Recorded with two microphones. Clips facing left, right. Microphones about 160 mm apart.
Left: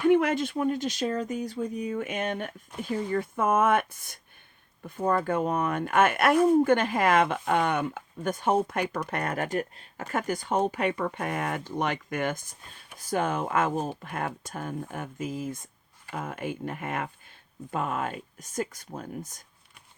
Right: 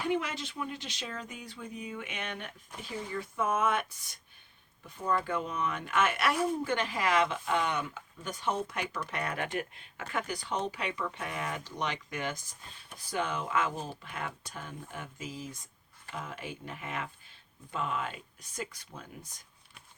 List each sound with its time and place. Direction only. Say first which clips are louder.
0.1 s speech: left 9 dB; 55° left (ahead or behind)